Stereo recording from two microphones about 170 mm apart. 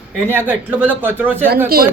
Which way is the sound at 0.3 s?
10° right (ahead or behind).